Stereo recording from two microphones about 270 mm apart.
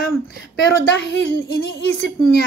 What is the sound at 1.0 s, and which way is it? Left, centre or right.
Speech, left.